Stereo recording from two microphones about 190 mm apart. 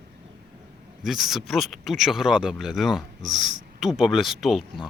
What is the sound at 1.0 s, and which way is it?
Speech, centre (ahead or behind).